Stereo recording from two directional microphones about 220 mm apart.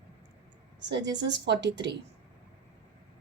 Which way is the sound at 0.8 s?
55° right (ahead or behind).